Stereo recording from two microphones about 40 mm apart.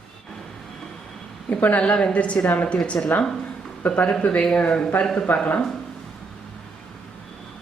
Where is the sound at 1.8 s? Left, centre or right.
Left.